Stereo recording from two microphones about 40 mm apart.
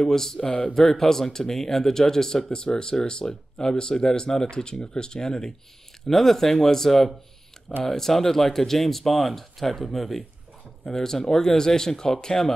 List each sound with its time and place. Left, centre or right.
0.0 s speech: centre
6.0 s speech: centre